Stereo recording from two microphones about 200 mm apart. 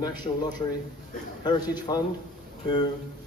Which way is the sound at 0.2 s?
20° left (ahead or behind).